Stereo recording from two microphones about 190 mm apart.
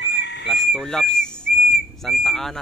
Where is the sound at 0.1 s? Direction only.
60° left (ahead or behind).